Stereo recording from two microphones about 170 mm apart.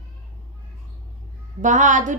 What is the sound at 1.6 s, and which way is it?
Speech, 50° right (ahead or behind).